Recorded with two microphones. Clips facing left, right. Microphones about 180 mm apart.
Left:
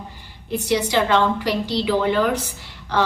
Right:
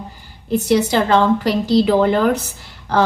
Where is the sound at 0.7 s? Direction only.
45° right (ahead or behind).